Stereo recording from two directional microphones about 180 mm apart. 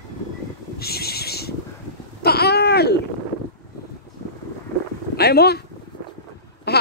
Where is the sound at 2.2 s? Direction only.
60° left (ahead or behind).